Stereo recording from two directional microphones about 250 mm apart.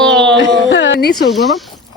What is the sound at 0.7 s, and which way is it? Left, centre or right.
Speech, left.